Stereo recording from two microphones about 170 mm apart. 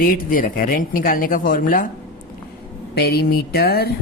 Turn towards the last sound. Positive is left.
turn(degrees=65)  # may be behind; listen again after turning